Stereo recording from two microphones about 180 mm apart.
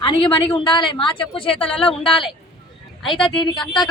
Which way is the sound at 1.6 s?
5° left (ahead or behind).